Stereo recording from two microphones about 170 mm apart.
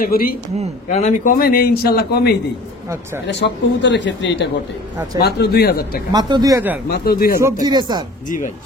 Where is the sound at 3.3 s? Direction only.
90° left.